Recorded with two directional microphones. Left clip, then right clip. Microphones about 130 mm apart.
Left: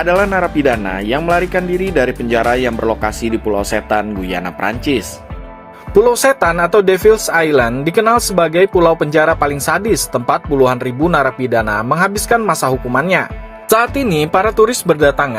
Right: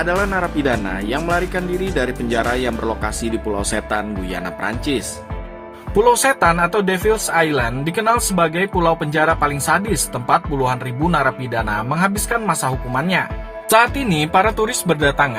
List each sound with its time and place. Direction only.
0.0 s speech: 25° left (ahead or behind); by 13.2 s 50° left (ahead or behind)
13.7 s speech: 40° left (ahead or behind)